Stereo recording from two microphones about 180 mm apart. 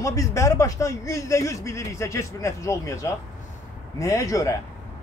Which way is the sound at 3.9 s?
20° left (ahead or behind).